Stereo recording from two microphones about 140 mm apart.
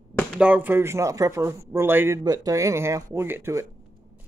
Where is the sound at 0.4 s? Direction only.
10° right (ahead or behind).